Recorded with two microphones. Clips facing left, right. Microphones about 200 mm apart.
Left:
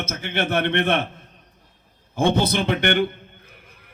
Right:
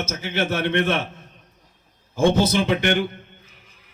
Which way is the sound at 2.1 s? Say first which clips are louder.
Right 2 dB; 60° left (ahead or behind).